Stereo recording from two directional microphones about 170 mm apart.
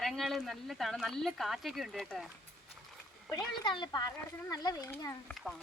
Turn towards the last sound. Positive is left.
turn(degrees=0)  # may be behind; listen again after turning